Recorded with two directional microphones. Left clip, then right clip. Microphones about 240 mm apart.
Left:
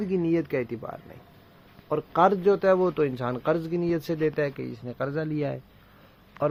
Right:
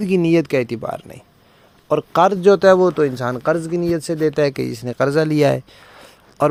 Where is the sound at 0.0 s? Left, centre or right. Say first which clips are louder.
Right 10 dB; right.